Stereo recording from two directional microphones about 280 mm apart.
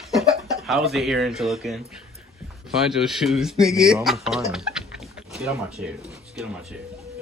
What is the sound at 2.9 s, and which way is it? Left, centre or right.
Speech, centre.